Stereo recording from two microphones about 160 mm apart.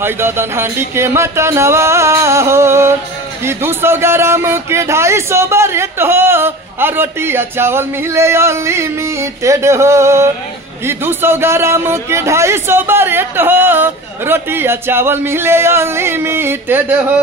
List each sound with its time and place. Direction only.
0.0 s a man's voice: 15° right (ahead or behind)